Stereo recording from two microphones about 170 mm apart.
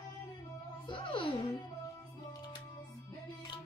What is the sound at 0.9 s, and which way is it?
Music, 30° left (ahead or behind).